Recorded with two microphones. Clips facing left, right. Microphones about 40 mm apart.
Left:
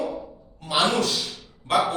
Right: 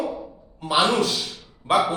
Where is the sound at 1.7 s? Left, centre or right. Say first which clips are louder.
Right 2 dB; centre.